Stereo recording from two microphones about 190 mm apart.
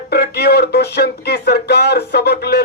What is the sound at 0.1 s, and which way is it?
Speech, 55° left (ahead or behind).